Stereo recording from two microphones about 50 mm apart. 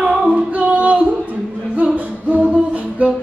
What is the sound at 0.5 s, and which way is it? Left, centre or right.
Music, right.